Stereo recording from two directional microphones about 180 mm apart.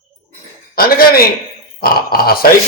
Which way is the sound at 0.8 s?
55° left (ahead or behind).